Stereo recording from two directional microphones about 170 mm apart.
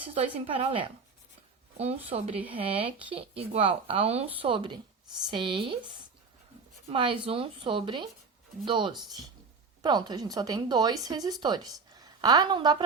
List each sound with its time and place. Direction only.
0.1 s a woman's voice: 35° right (ahead or behind)
6.9 s a woman's voice: 30° right (ahead or behind)